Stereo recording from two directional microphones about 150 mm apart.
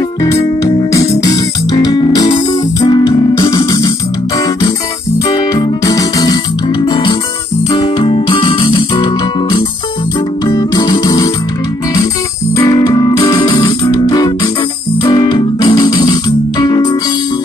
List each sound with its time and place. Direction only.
0.9 s music: 25° left (ahead or behind)
5.3 s music: 25° left (ahead or behind)
12.5 s music: 25° left (ahead or behind)